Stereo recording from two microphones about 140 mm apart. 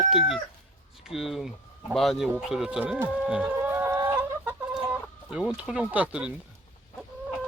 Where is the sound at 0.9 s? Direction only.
Centre (ahead or behind).